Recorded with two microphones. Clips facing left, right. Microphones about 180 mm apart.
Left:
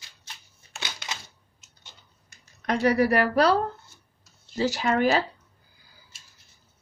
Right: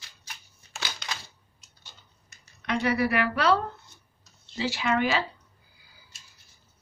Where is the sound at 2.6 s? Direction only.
40° left (ahead or behind).